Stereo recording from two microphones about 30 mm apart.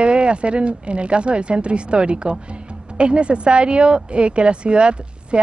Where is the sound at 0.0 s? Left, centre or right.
Right.